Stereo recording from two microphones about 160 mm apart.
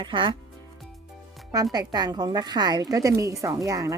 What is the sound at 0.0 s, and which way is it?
Speech, 30° right (ahead or behind).